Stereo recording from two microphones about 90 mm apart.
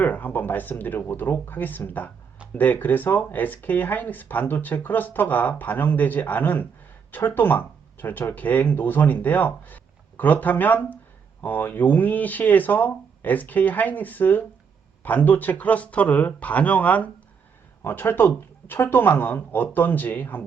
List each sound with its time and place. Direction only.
0.0 s speech: 20° left (ahead or behind)